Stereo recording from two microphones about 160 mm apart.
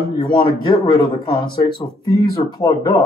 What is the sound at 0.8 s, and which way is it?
Speech, 25° left (ahead or behind).